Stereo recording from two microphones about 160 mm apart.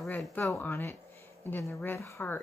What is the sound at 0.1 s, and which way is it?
Speech, 10° left (ahead or behind).